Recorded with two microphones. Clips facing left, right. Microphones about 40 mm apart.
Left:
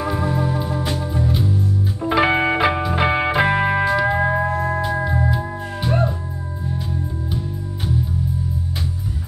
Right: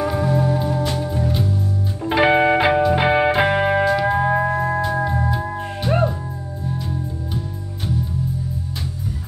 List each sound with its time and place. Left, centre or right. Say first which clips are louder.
0.0 s music: right 2 dB; centre
4.3 s music: right 1 dB; centre
5.4 s music: right 1 dB; centre